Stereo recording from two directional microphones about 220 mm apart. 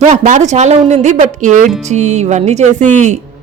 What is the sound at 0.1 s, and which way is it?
A woman's voice, 35° right (ahead or behind).